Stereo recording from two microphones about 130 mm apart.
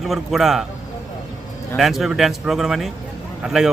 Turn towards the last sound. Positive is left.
turn(degrees=-5)  # may be behind; listen again after turning